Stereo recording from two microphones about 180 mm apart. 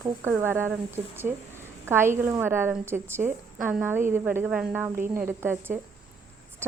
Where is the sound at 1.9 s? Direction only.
15° right (ahead or behind).